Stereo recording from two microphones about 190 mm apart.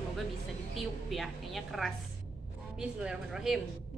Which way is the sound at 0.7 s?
Centre (ahead or behind).